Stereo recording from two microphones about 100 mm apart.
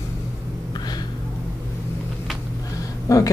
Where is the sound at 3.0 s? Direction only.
35° left (ahead or behind).